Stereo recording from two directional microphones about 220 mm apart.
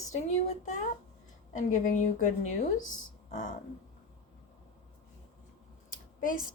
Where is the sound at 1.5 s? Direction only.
35° left (ahead or behind).